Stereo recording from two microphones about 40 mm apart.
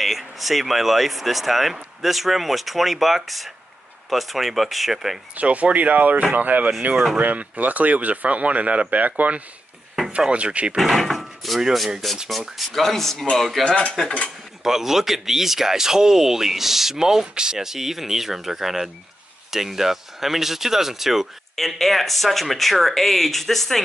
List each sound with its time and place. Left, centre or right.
0.0 s speech: centre
5.3 s speech: right
10.8 s speech: centre
13.7 s cutlery: left
14.6 s speech: centre